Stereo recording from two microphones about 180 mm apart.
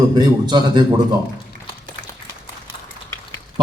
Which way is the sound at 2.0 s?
90° left.